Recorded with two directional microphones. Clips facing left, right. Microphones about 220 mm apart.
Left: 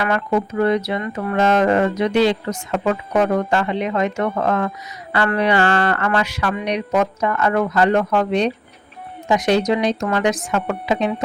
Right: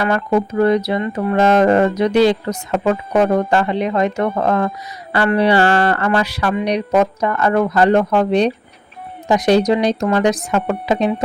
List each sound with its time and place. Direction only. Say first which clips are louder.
0.0 s music: right 3 dB; 35° right (ahead or behind)